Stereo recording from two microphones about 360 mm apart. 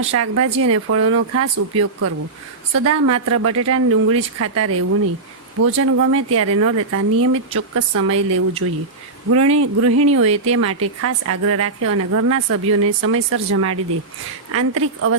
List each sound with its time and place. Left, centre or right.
0.1 s a woman's voice: right